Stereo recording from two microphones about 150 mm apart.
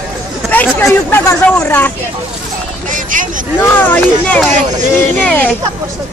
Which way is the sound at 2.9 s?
60° right (ahead or behind).